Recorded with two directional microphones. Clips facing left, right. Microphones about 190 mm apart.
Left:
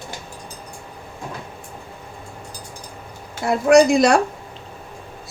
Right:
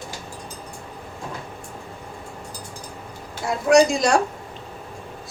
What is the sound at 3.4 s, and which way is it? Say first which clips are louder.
Speech: left 3 dB; 60° left (ahead or behind).